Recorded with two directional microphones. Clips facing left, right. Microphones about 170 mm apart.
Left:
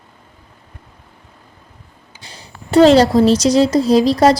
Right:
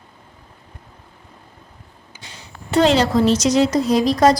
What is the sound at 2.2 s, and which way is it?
A woman's voice, 35° left (ahead or behind).